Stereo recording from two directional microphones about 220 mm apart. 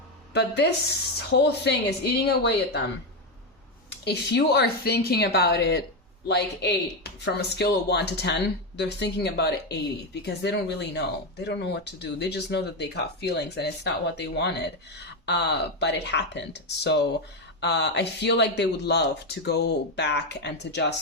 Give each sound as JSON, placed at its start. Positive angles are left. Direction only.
{"t": 0.3, "sound": "speech", "side_deg": 50}
{"t": 3.8, "sound": "speech", "side_deg": 50}